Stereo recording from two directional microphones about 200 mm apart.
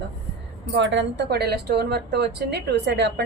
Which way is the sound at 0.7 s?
65° right (ahead or behind).